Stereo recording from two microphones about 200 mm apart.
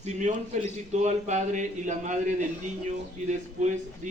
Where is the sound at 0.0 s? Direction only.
35° right (ahead or behind).